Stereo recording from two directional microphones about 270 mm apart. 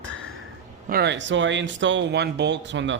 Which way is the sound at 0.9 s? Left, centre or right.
Right.